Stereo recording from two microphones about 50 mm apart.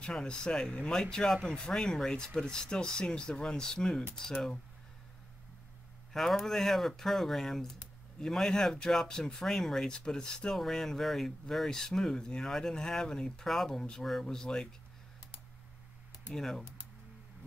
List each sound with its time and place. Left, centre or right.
0.0 s speech: centre
6.1 s speech: centre
16.3 s speech: centre